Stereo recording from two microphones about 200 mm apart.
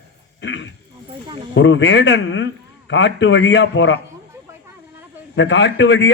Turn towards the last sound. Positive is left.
turn(degrees=60)  # may be behind; listen again after turning